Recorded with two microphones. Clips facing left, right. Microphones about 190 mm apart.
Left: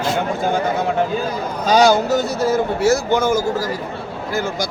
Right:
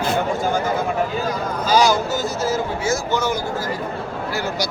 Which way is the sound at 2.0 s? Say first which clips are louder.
Left 4 dB; 65° left (ahead or behind).